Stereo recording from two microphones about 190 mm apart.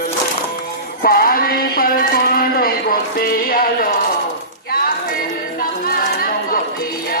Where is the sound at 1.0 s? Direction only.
50° left (ahead or behind).